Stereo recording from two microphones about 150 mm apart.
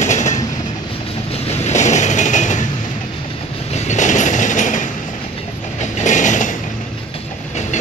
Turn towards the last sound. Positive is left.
turn(degrees=55)  # may be behind; listen again after turning